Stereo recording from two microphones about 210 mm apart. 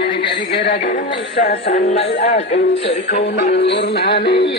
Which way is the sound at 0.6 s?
45° left (ahead or behind).